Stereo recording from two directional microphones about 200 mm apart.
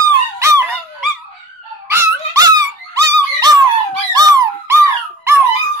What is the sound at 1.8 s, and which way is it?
Squeak, 15° right (ahead or behind).